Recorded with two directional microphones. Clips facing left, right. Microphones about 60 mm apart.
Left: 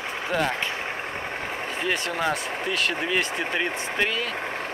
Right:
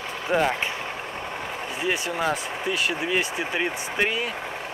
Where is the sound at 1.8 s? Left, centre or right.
Centre.